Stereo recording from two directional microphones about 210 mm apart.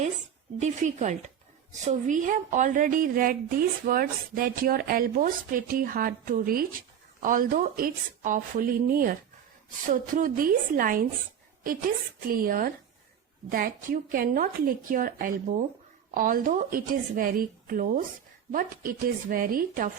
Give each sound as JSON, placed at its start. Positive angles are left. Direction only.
{"t": 0.6, "sound": "a woman's voice", "side_deg": -35}